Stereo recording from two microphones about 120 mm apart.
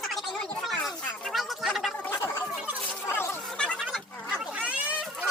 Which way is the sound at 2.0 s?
20° left (ahead or behind).